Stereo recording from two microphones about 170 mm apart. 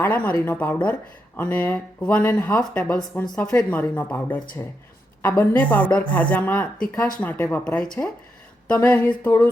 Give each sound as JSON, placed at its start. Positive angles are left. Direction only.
{"t": 0.0, "sound": "speech", "side_deg": 10}